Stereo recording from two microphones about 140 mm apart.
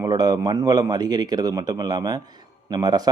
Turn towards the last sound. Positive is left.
turn(degrees=-30)  # may be behind; listen again after turning